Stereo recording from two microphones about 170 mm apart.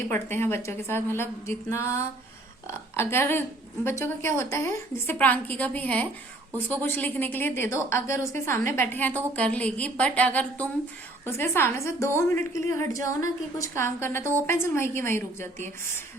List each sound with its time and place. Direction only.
0.1 s a woman's voice: 15° left (ahead or behind)